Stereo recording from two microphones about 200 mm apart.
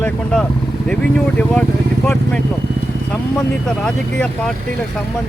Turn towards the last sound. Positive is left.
turn(degrees=5)  # may be behind; listen again after turning